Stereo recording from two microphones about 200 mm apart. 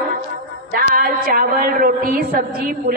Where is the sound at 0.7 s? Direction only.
45° right (ahead or behind).